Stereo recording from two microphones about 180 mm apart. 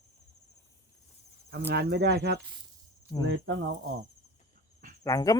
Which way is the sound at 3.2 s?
85° right.